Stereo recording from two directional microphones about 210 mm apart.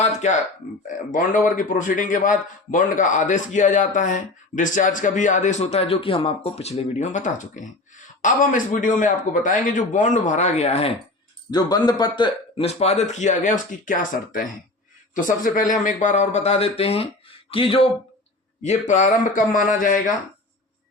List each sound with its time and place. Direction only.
0.0 s a sound: 35° left (ahead or behind)
1.1 s a man's voice: 40° left (ahead or behind)
11.5 s a man's voice: 20° left (ahead or behind); by 20.1 s 40° left (ahead or behind)